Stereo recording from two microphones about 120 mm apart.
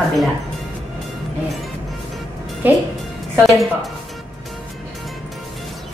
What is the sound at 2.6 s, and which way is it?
Speech, 15° right (ahead or behind).